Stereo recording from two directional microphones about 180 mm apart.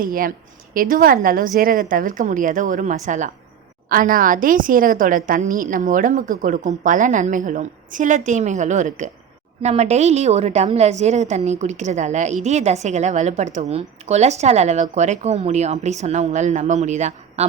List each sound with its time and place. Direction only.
0.0 s a woman's voice: 50° right (ahead or behind)